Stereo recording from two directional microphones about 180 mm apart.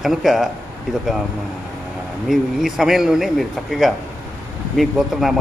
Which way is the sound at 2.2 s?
Centre (ahead or behind).